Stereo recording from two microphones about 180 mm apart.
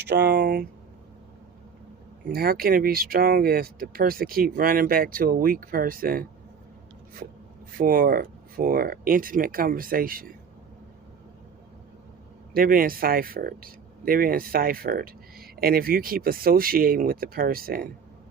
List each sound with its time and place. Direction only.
0.1 s speech: 65° right (ahead or behind)
2.2 s speech: 55° right (ahead or behind)
7.8 s speech: 50° right (ahead or behind)
12.5 s speech: 55° right (ahead or behind)